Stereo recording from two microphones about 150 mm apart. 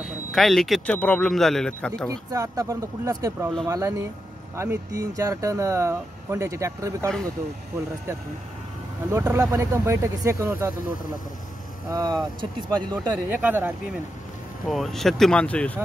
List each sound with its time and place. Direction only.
0.0 s a man's voice: centre (ahead or behind)
2.0 s speech: 20° right (ahead or behind)
9.1 s speech: 15° right (ahead or behind)
11.9 s speech: 25° right (ahead or behind)
12.9 s speech: 10° right (ahead or behind)
14.7 s a man's voice: centre (ahead or behind)